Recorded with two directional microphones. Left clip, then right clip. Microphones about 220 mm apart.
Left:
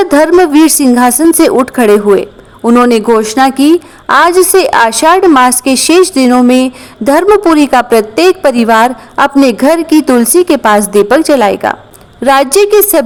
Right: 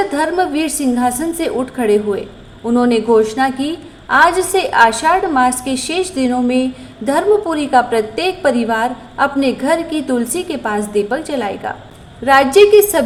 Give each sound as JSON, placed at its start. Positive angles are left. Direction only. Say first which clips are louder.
{"t": 0.1, "sound": "a woman's voice", "louder": "left 10 dB", "side_deg": 50}